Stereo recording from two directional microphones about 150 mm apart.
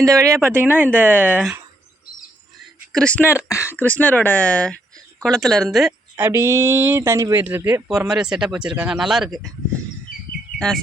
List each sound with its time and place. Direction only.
0.0 s speech: 20° right (ahead or behind)
2.9 s speech: 5° left (ahead or behind)
3.5 s speech: 15° left (ahead or behind); by 5.9 s centre (ahead or behind)
6.1 s speech: 15° right (ahead or behind); by 9.5 s centre (ahead or behind)